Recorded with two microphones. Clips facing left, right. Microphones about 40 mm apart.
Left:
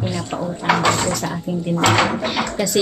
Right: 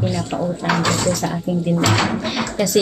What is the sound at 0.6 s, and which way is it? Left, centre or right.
Speech, left.